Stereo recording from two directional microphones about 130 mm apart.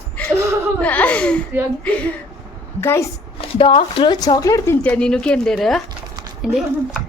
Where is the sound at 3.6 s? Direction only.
45° left (ahead or behind).